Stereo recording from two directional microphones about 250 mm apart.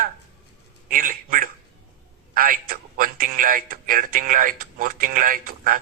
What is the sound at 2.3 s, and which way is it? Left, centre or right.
A man's voice, right.